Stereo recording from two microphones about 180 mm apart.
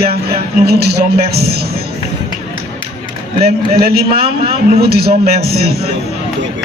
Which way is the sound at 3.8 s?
55° right (ahead or behind).